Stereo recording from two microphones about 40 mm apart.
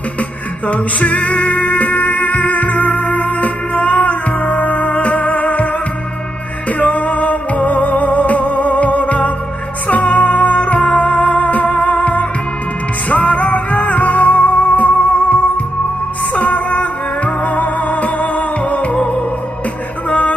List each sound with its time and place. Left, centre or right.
0.7 s music: left
6.8 s music: left
20.1 s music: left